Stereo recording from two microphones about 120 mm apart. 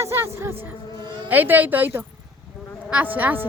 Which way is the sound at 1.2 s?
15° right (ahead or behind).